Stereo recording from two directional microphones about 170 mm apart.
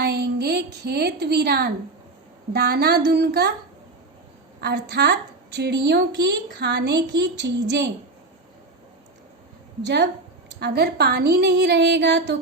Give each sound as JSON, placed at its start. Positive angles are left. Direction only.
{"t": 0.0, "sound": "a sound", "side_deg": -75}
{"t": 0.9, "sound": "speech", "side_deg": -75}
{"t": 4.6, "sound": "a woman's voice", "side_deg": -80}
{"t": 9.8, "sound": "a woman's voice", "side_deg": -85}
{"t": 10.5, "sound": "a woman's voice", "side_deg": -75}